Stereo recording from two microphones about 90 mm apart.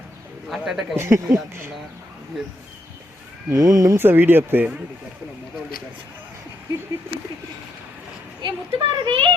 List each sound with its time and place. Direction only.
0.4 s speech: 5° right (ahead or behind)
0.9 s speech: 30° right (ahead or behind)
3.5 s speech: 40° right (ahead or behind)
4.0 s speech: 25° right (ahead or behind)
8.4 s speech: 65° right (ahead or behind)